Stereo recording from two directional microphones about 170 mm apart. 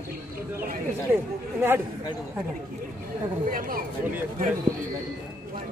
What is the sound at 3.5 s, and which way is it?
Speech, 55° right (ahead or behind).